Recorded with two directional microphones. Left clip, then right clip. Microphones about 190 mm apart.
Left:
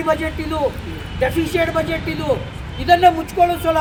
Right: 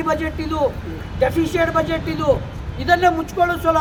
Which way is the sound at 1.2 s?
Centre (ahead or behind).